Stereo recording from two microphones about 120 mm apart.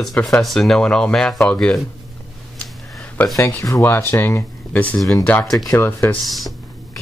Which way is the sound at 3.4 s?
25° left (ahead or behind).